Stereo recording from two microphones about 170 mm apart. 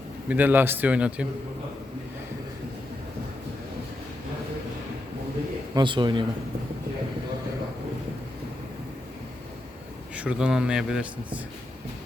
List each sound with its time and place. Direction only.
0.3 s a man's voice: 10° right (ahead or behind)
5.7 s speech: 25° right (ahead or behind)
10.2 s speech: 5° right (ahead or behind)